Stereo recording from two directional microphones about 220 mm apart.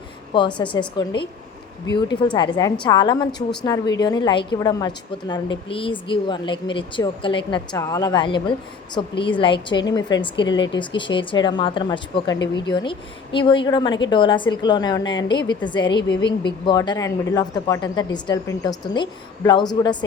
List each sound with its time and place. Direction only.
0.6 s speech: 20° left (ahead or behind)